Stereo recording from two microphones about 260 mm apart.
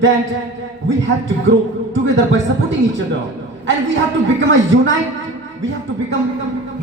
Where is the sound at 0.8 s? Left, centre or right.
Right.